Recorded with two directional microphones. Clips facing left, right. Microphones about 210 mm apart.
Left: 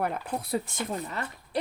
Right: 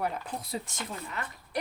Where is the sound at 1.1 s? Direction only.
35° left (ahead or behind).